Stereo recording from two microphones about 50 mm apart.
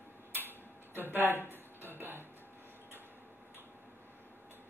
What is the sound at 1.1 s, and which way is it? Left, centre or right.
Speech, right.